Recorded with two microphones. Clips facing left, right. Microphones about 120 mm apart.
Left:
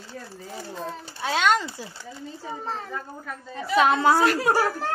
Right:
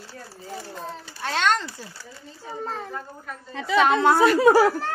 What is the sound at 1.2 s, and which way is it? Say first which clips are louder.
Speech: left 1 dB; 5° left (ahead or behind).